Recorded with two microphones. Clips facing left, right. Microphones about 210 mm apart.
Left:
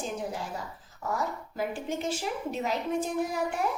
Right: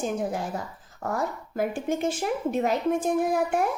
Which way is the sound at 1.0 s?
50° right (ahead or behind).